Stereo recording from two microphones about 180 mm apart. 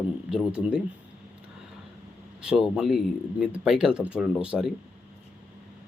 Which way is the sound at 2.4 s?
5° right (ahead or behind).